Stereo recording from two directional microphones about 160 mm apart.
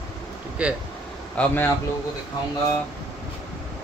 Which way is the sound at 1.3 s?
10° left (ahead or behind).